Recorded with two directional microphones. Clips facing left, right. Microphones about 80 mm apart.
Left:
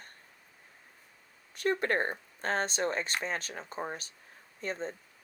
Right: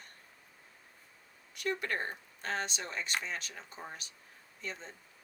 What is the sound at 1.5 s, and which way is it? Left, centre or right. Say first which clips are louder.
Speech: left 6 dB; left.